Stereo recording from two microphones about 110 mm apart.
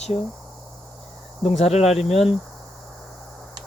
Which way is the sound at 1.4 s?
70° left (ahead or behind).